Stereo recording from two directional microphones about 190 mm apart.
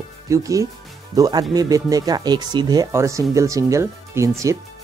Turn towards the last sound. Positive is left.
turn(degrees=-15)  # may be behind; listen again after turning